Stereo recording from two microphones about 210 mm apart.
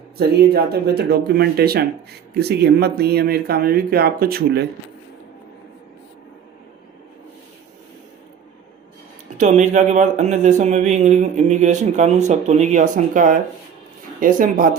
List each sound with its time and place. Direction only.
0.2 s speech: 50° right (ahead or behind)
9.4 s speech: 35° right (ahead or behind)